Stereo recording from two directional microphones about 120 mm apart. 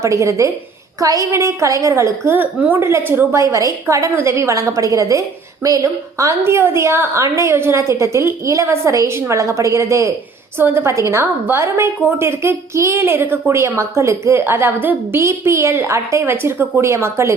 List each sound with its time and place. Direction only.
0.0 s a woman's voice: 25° right (ahead or behind)